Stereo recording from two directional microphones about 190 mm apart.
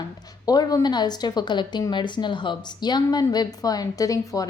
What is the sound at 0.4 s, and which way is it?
A woman's voice, 20° left (ahead or behind).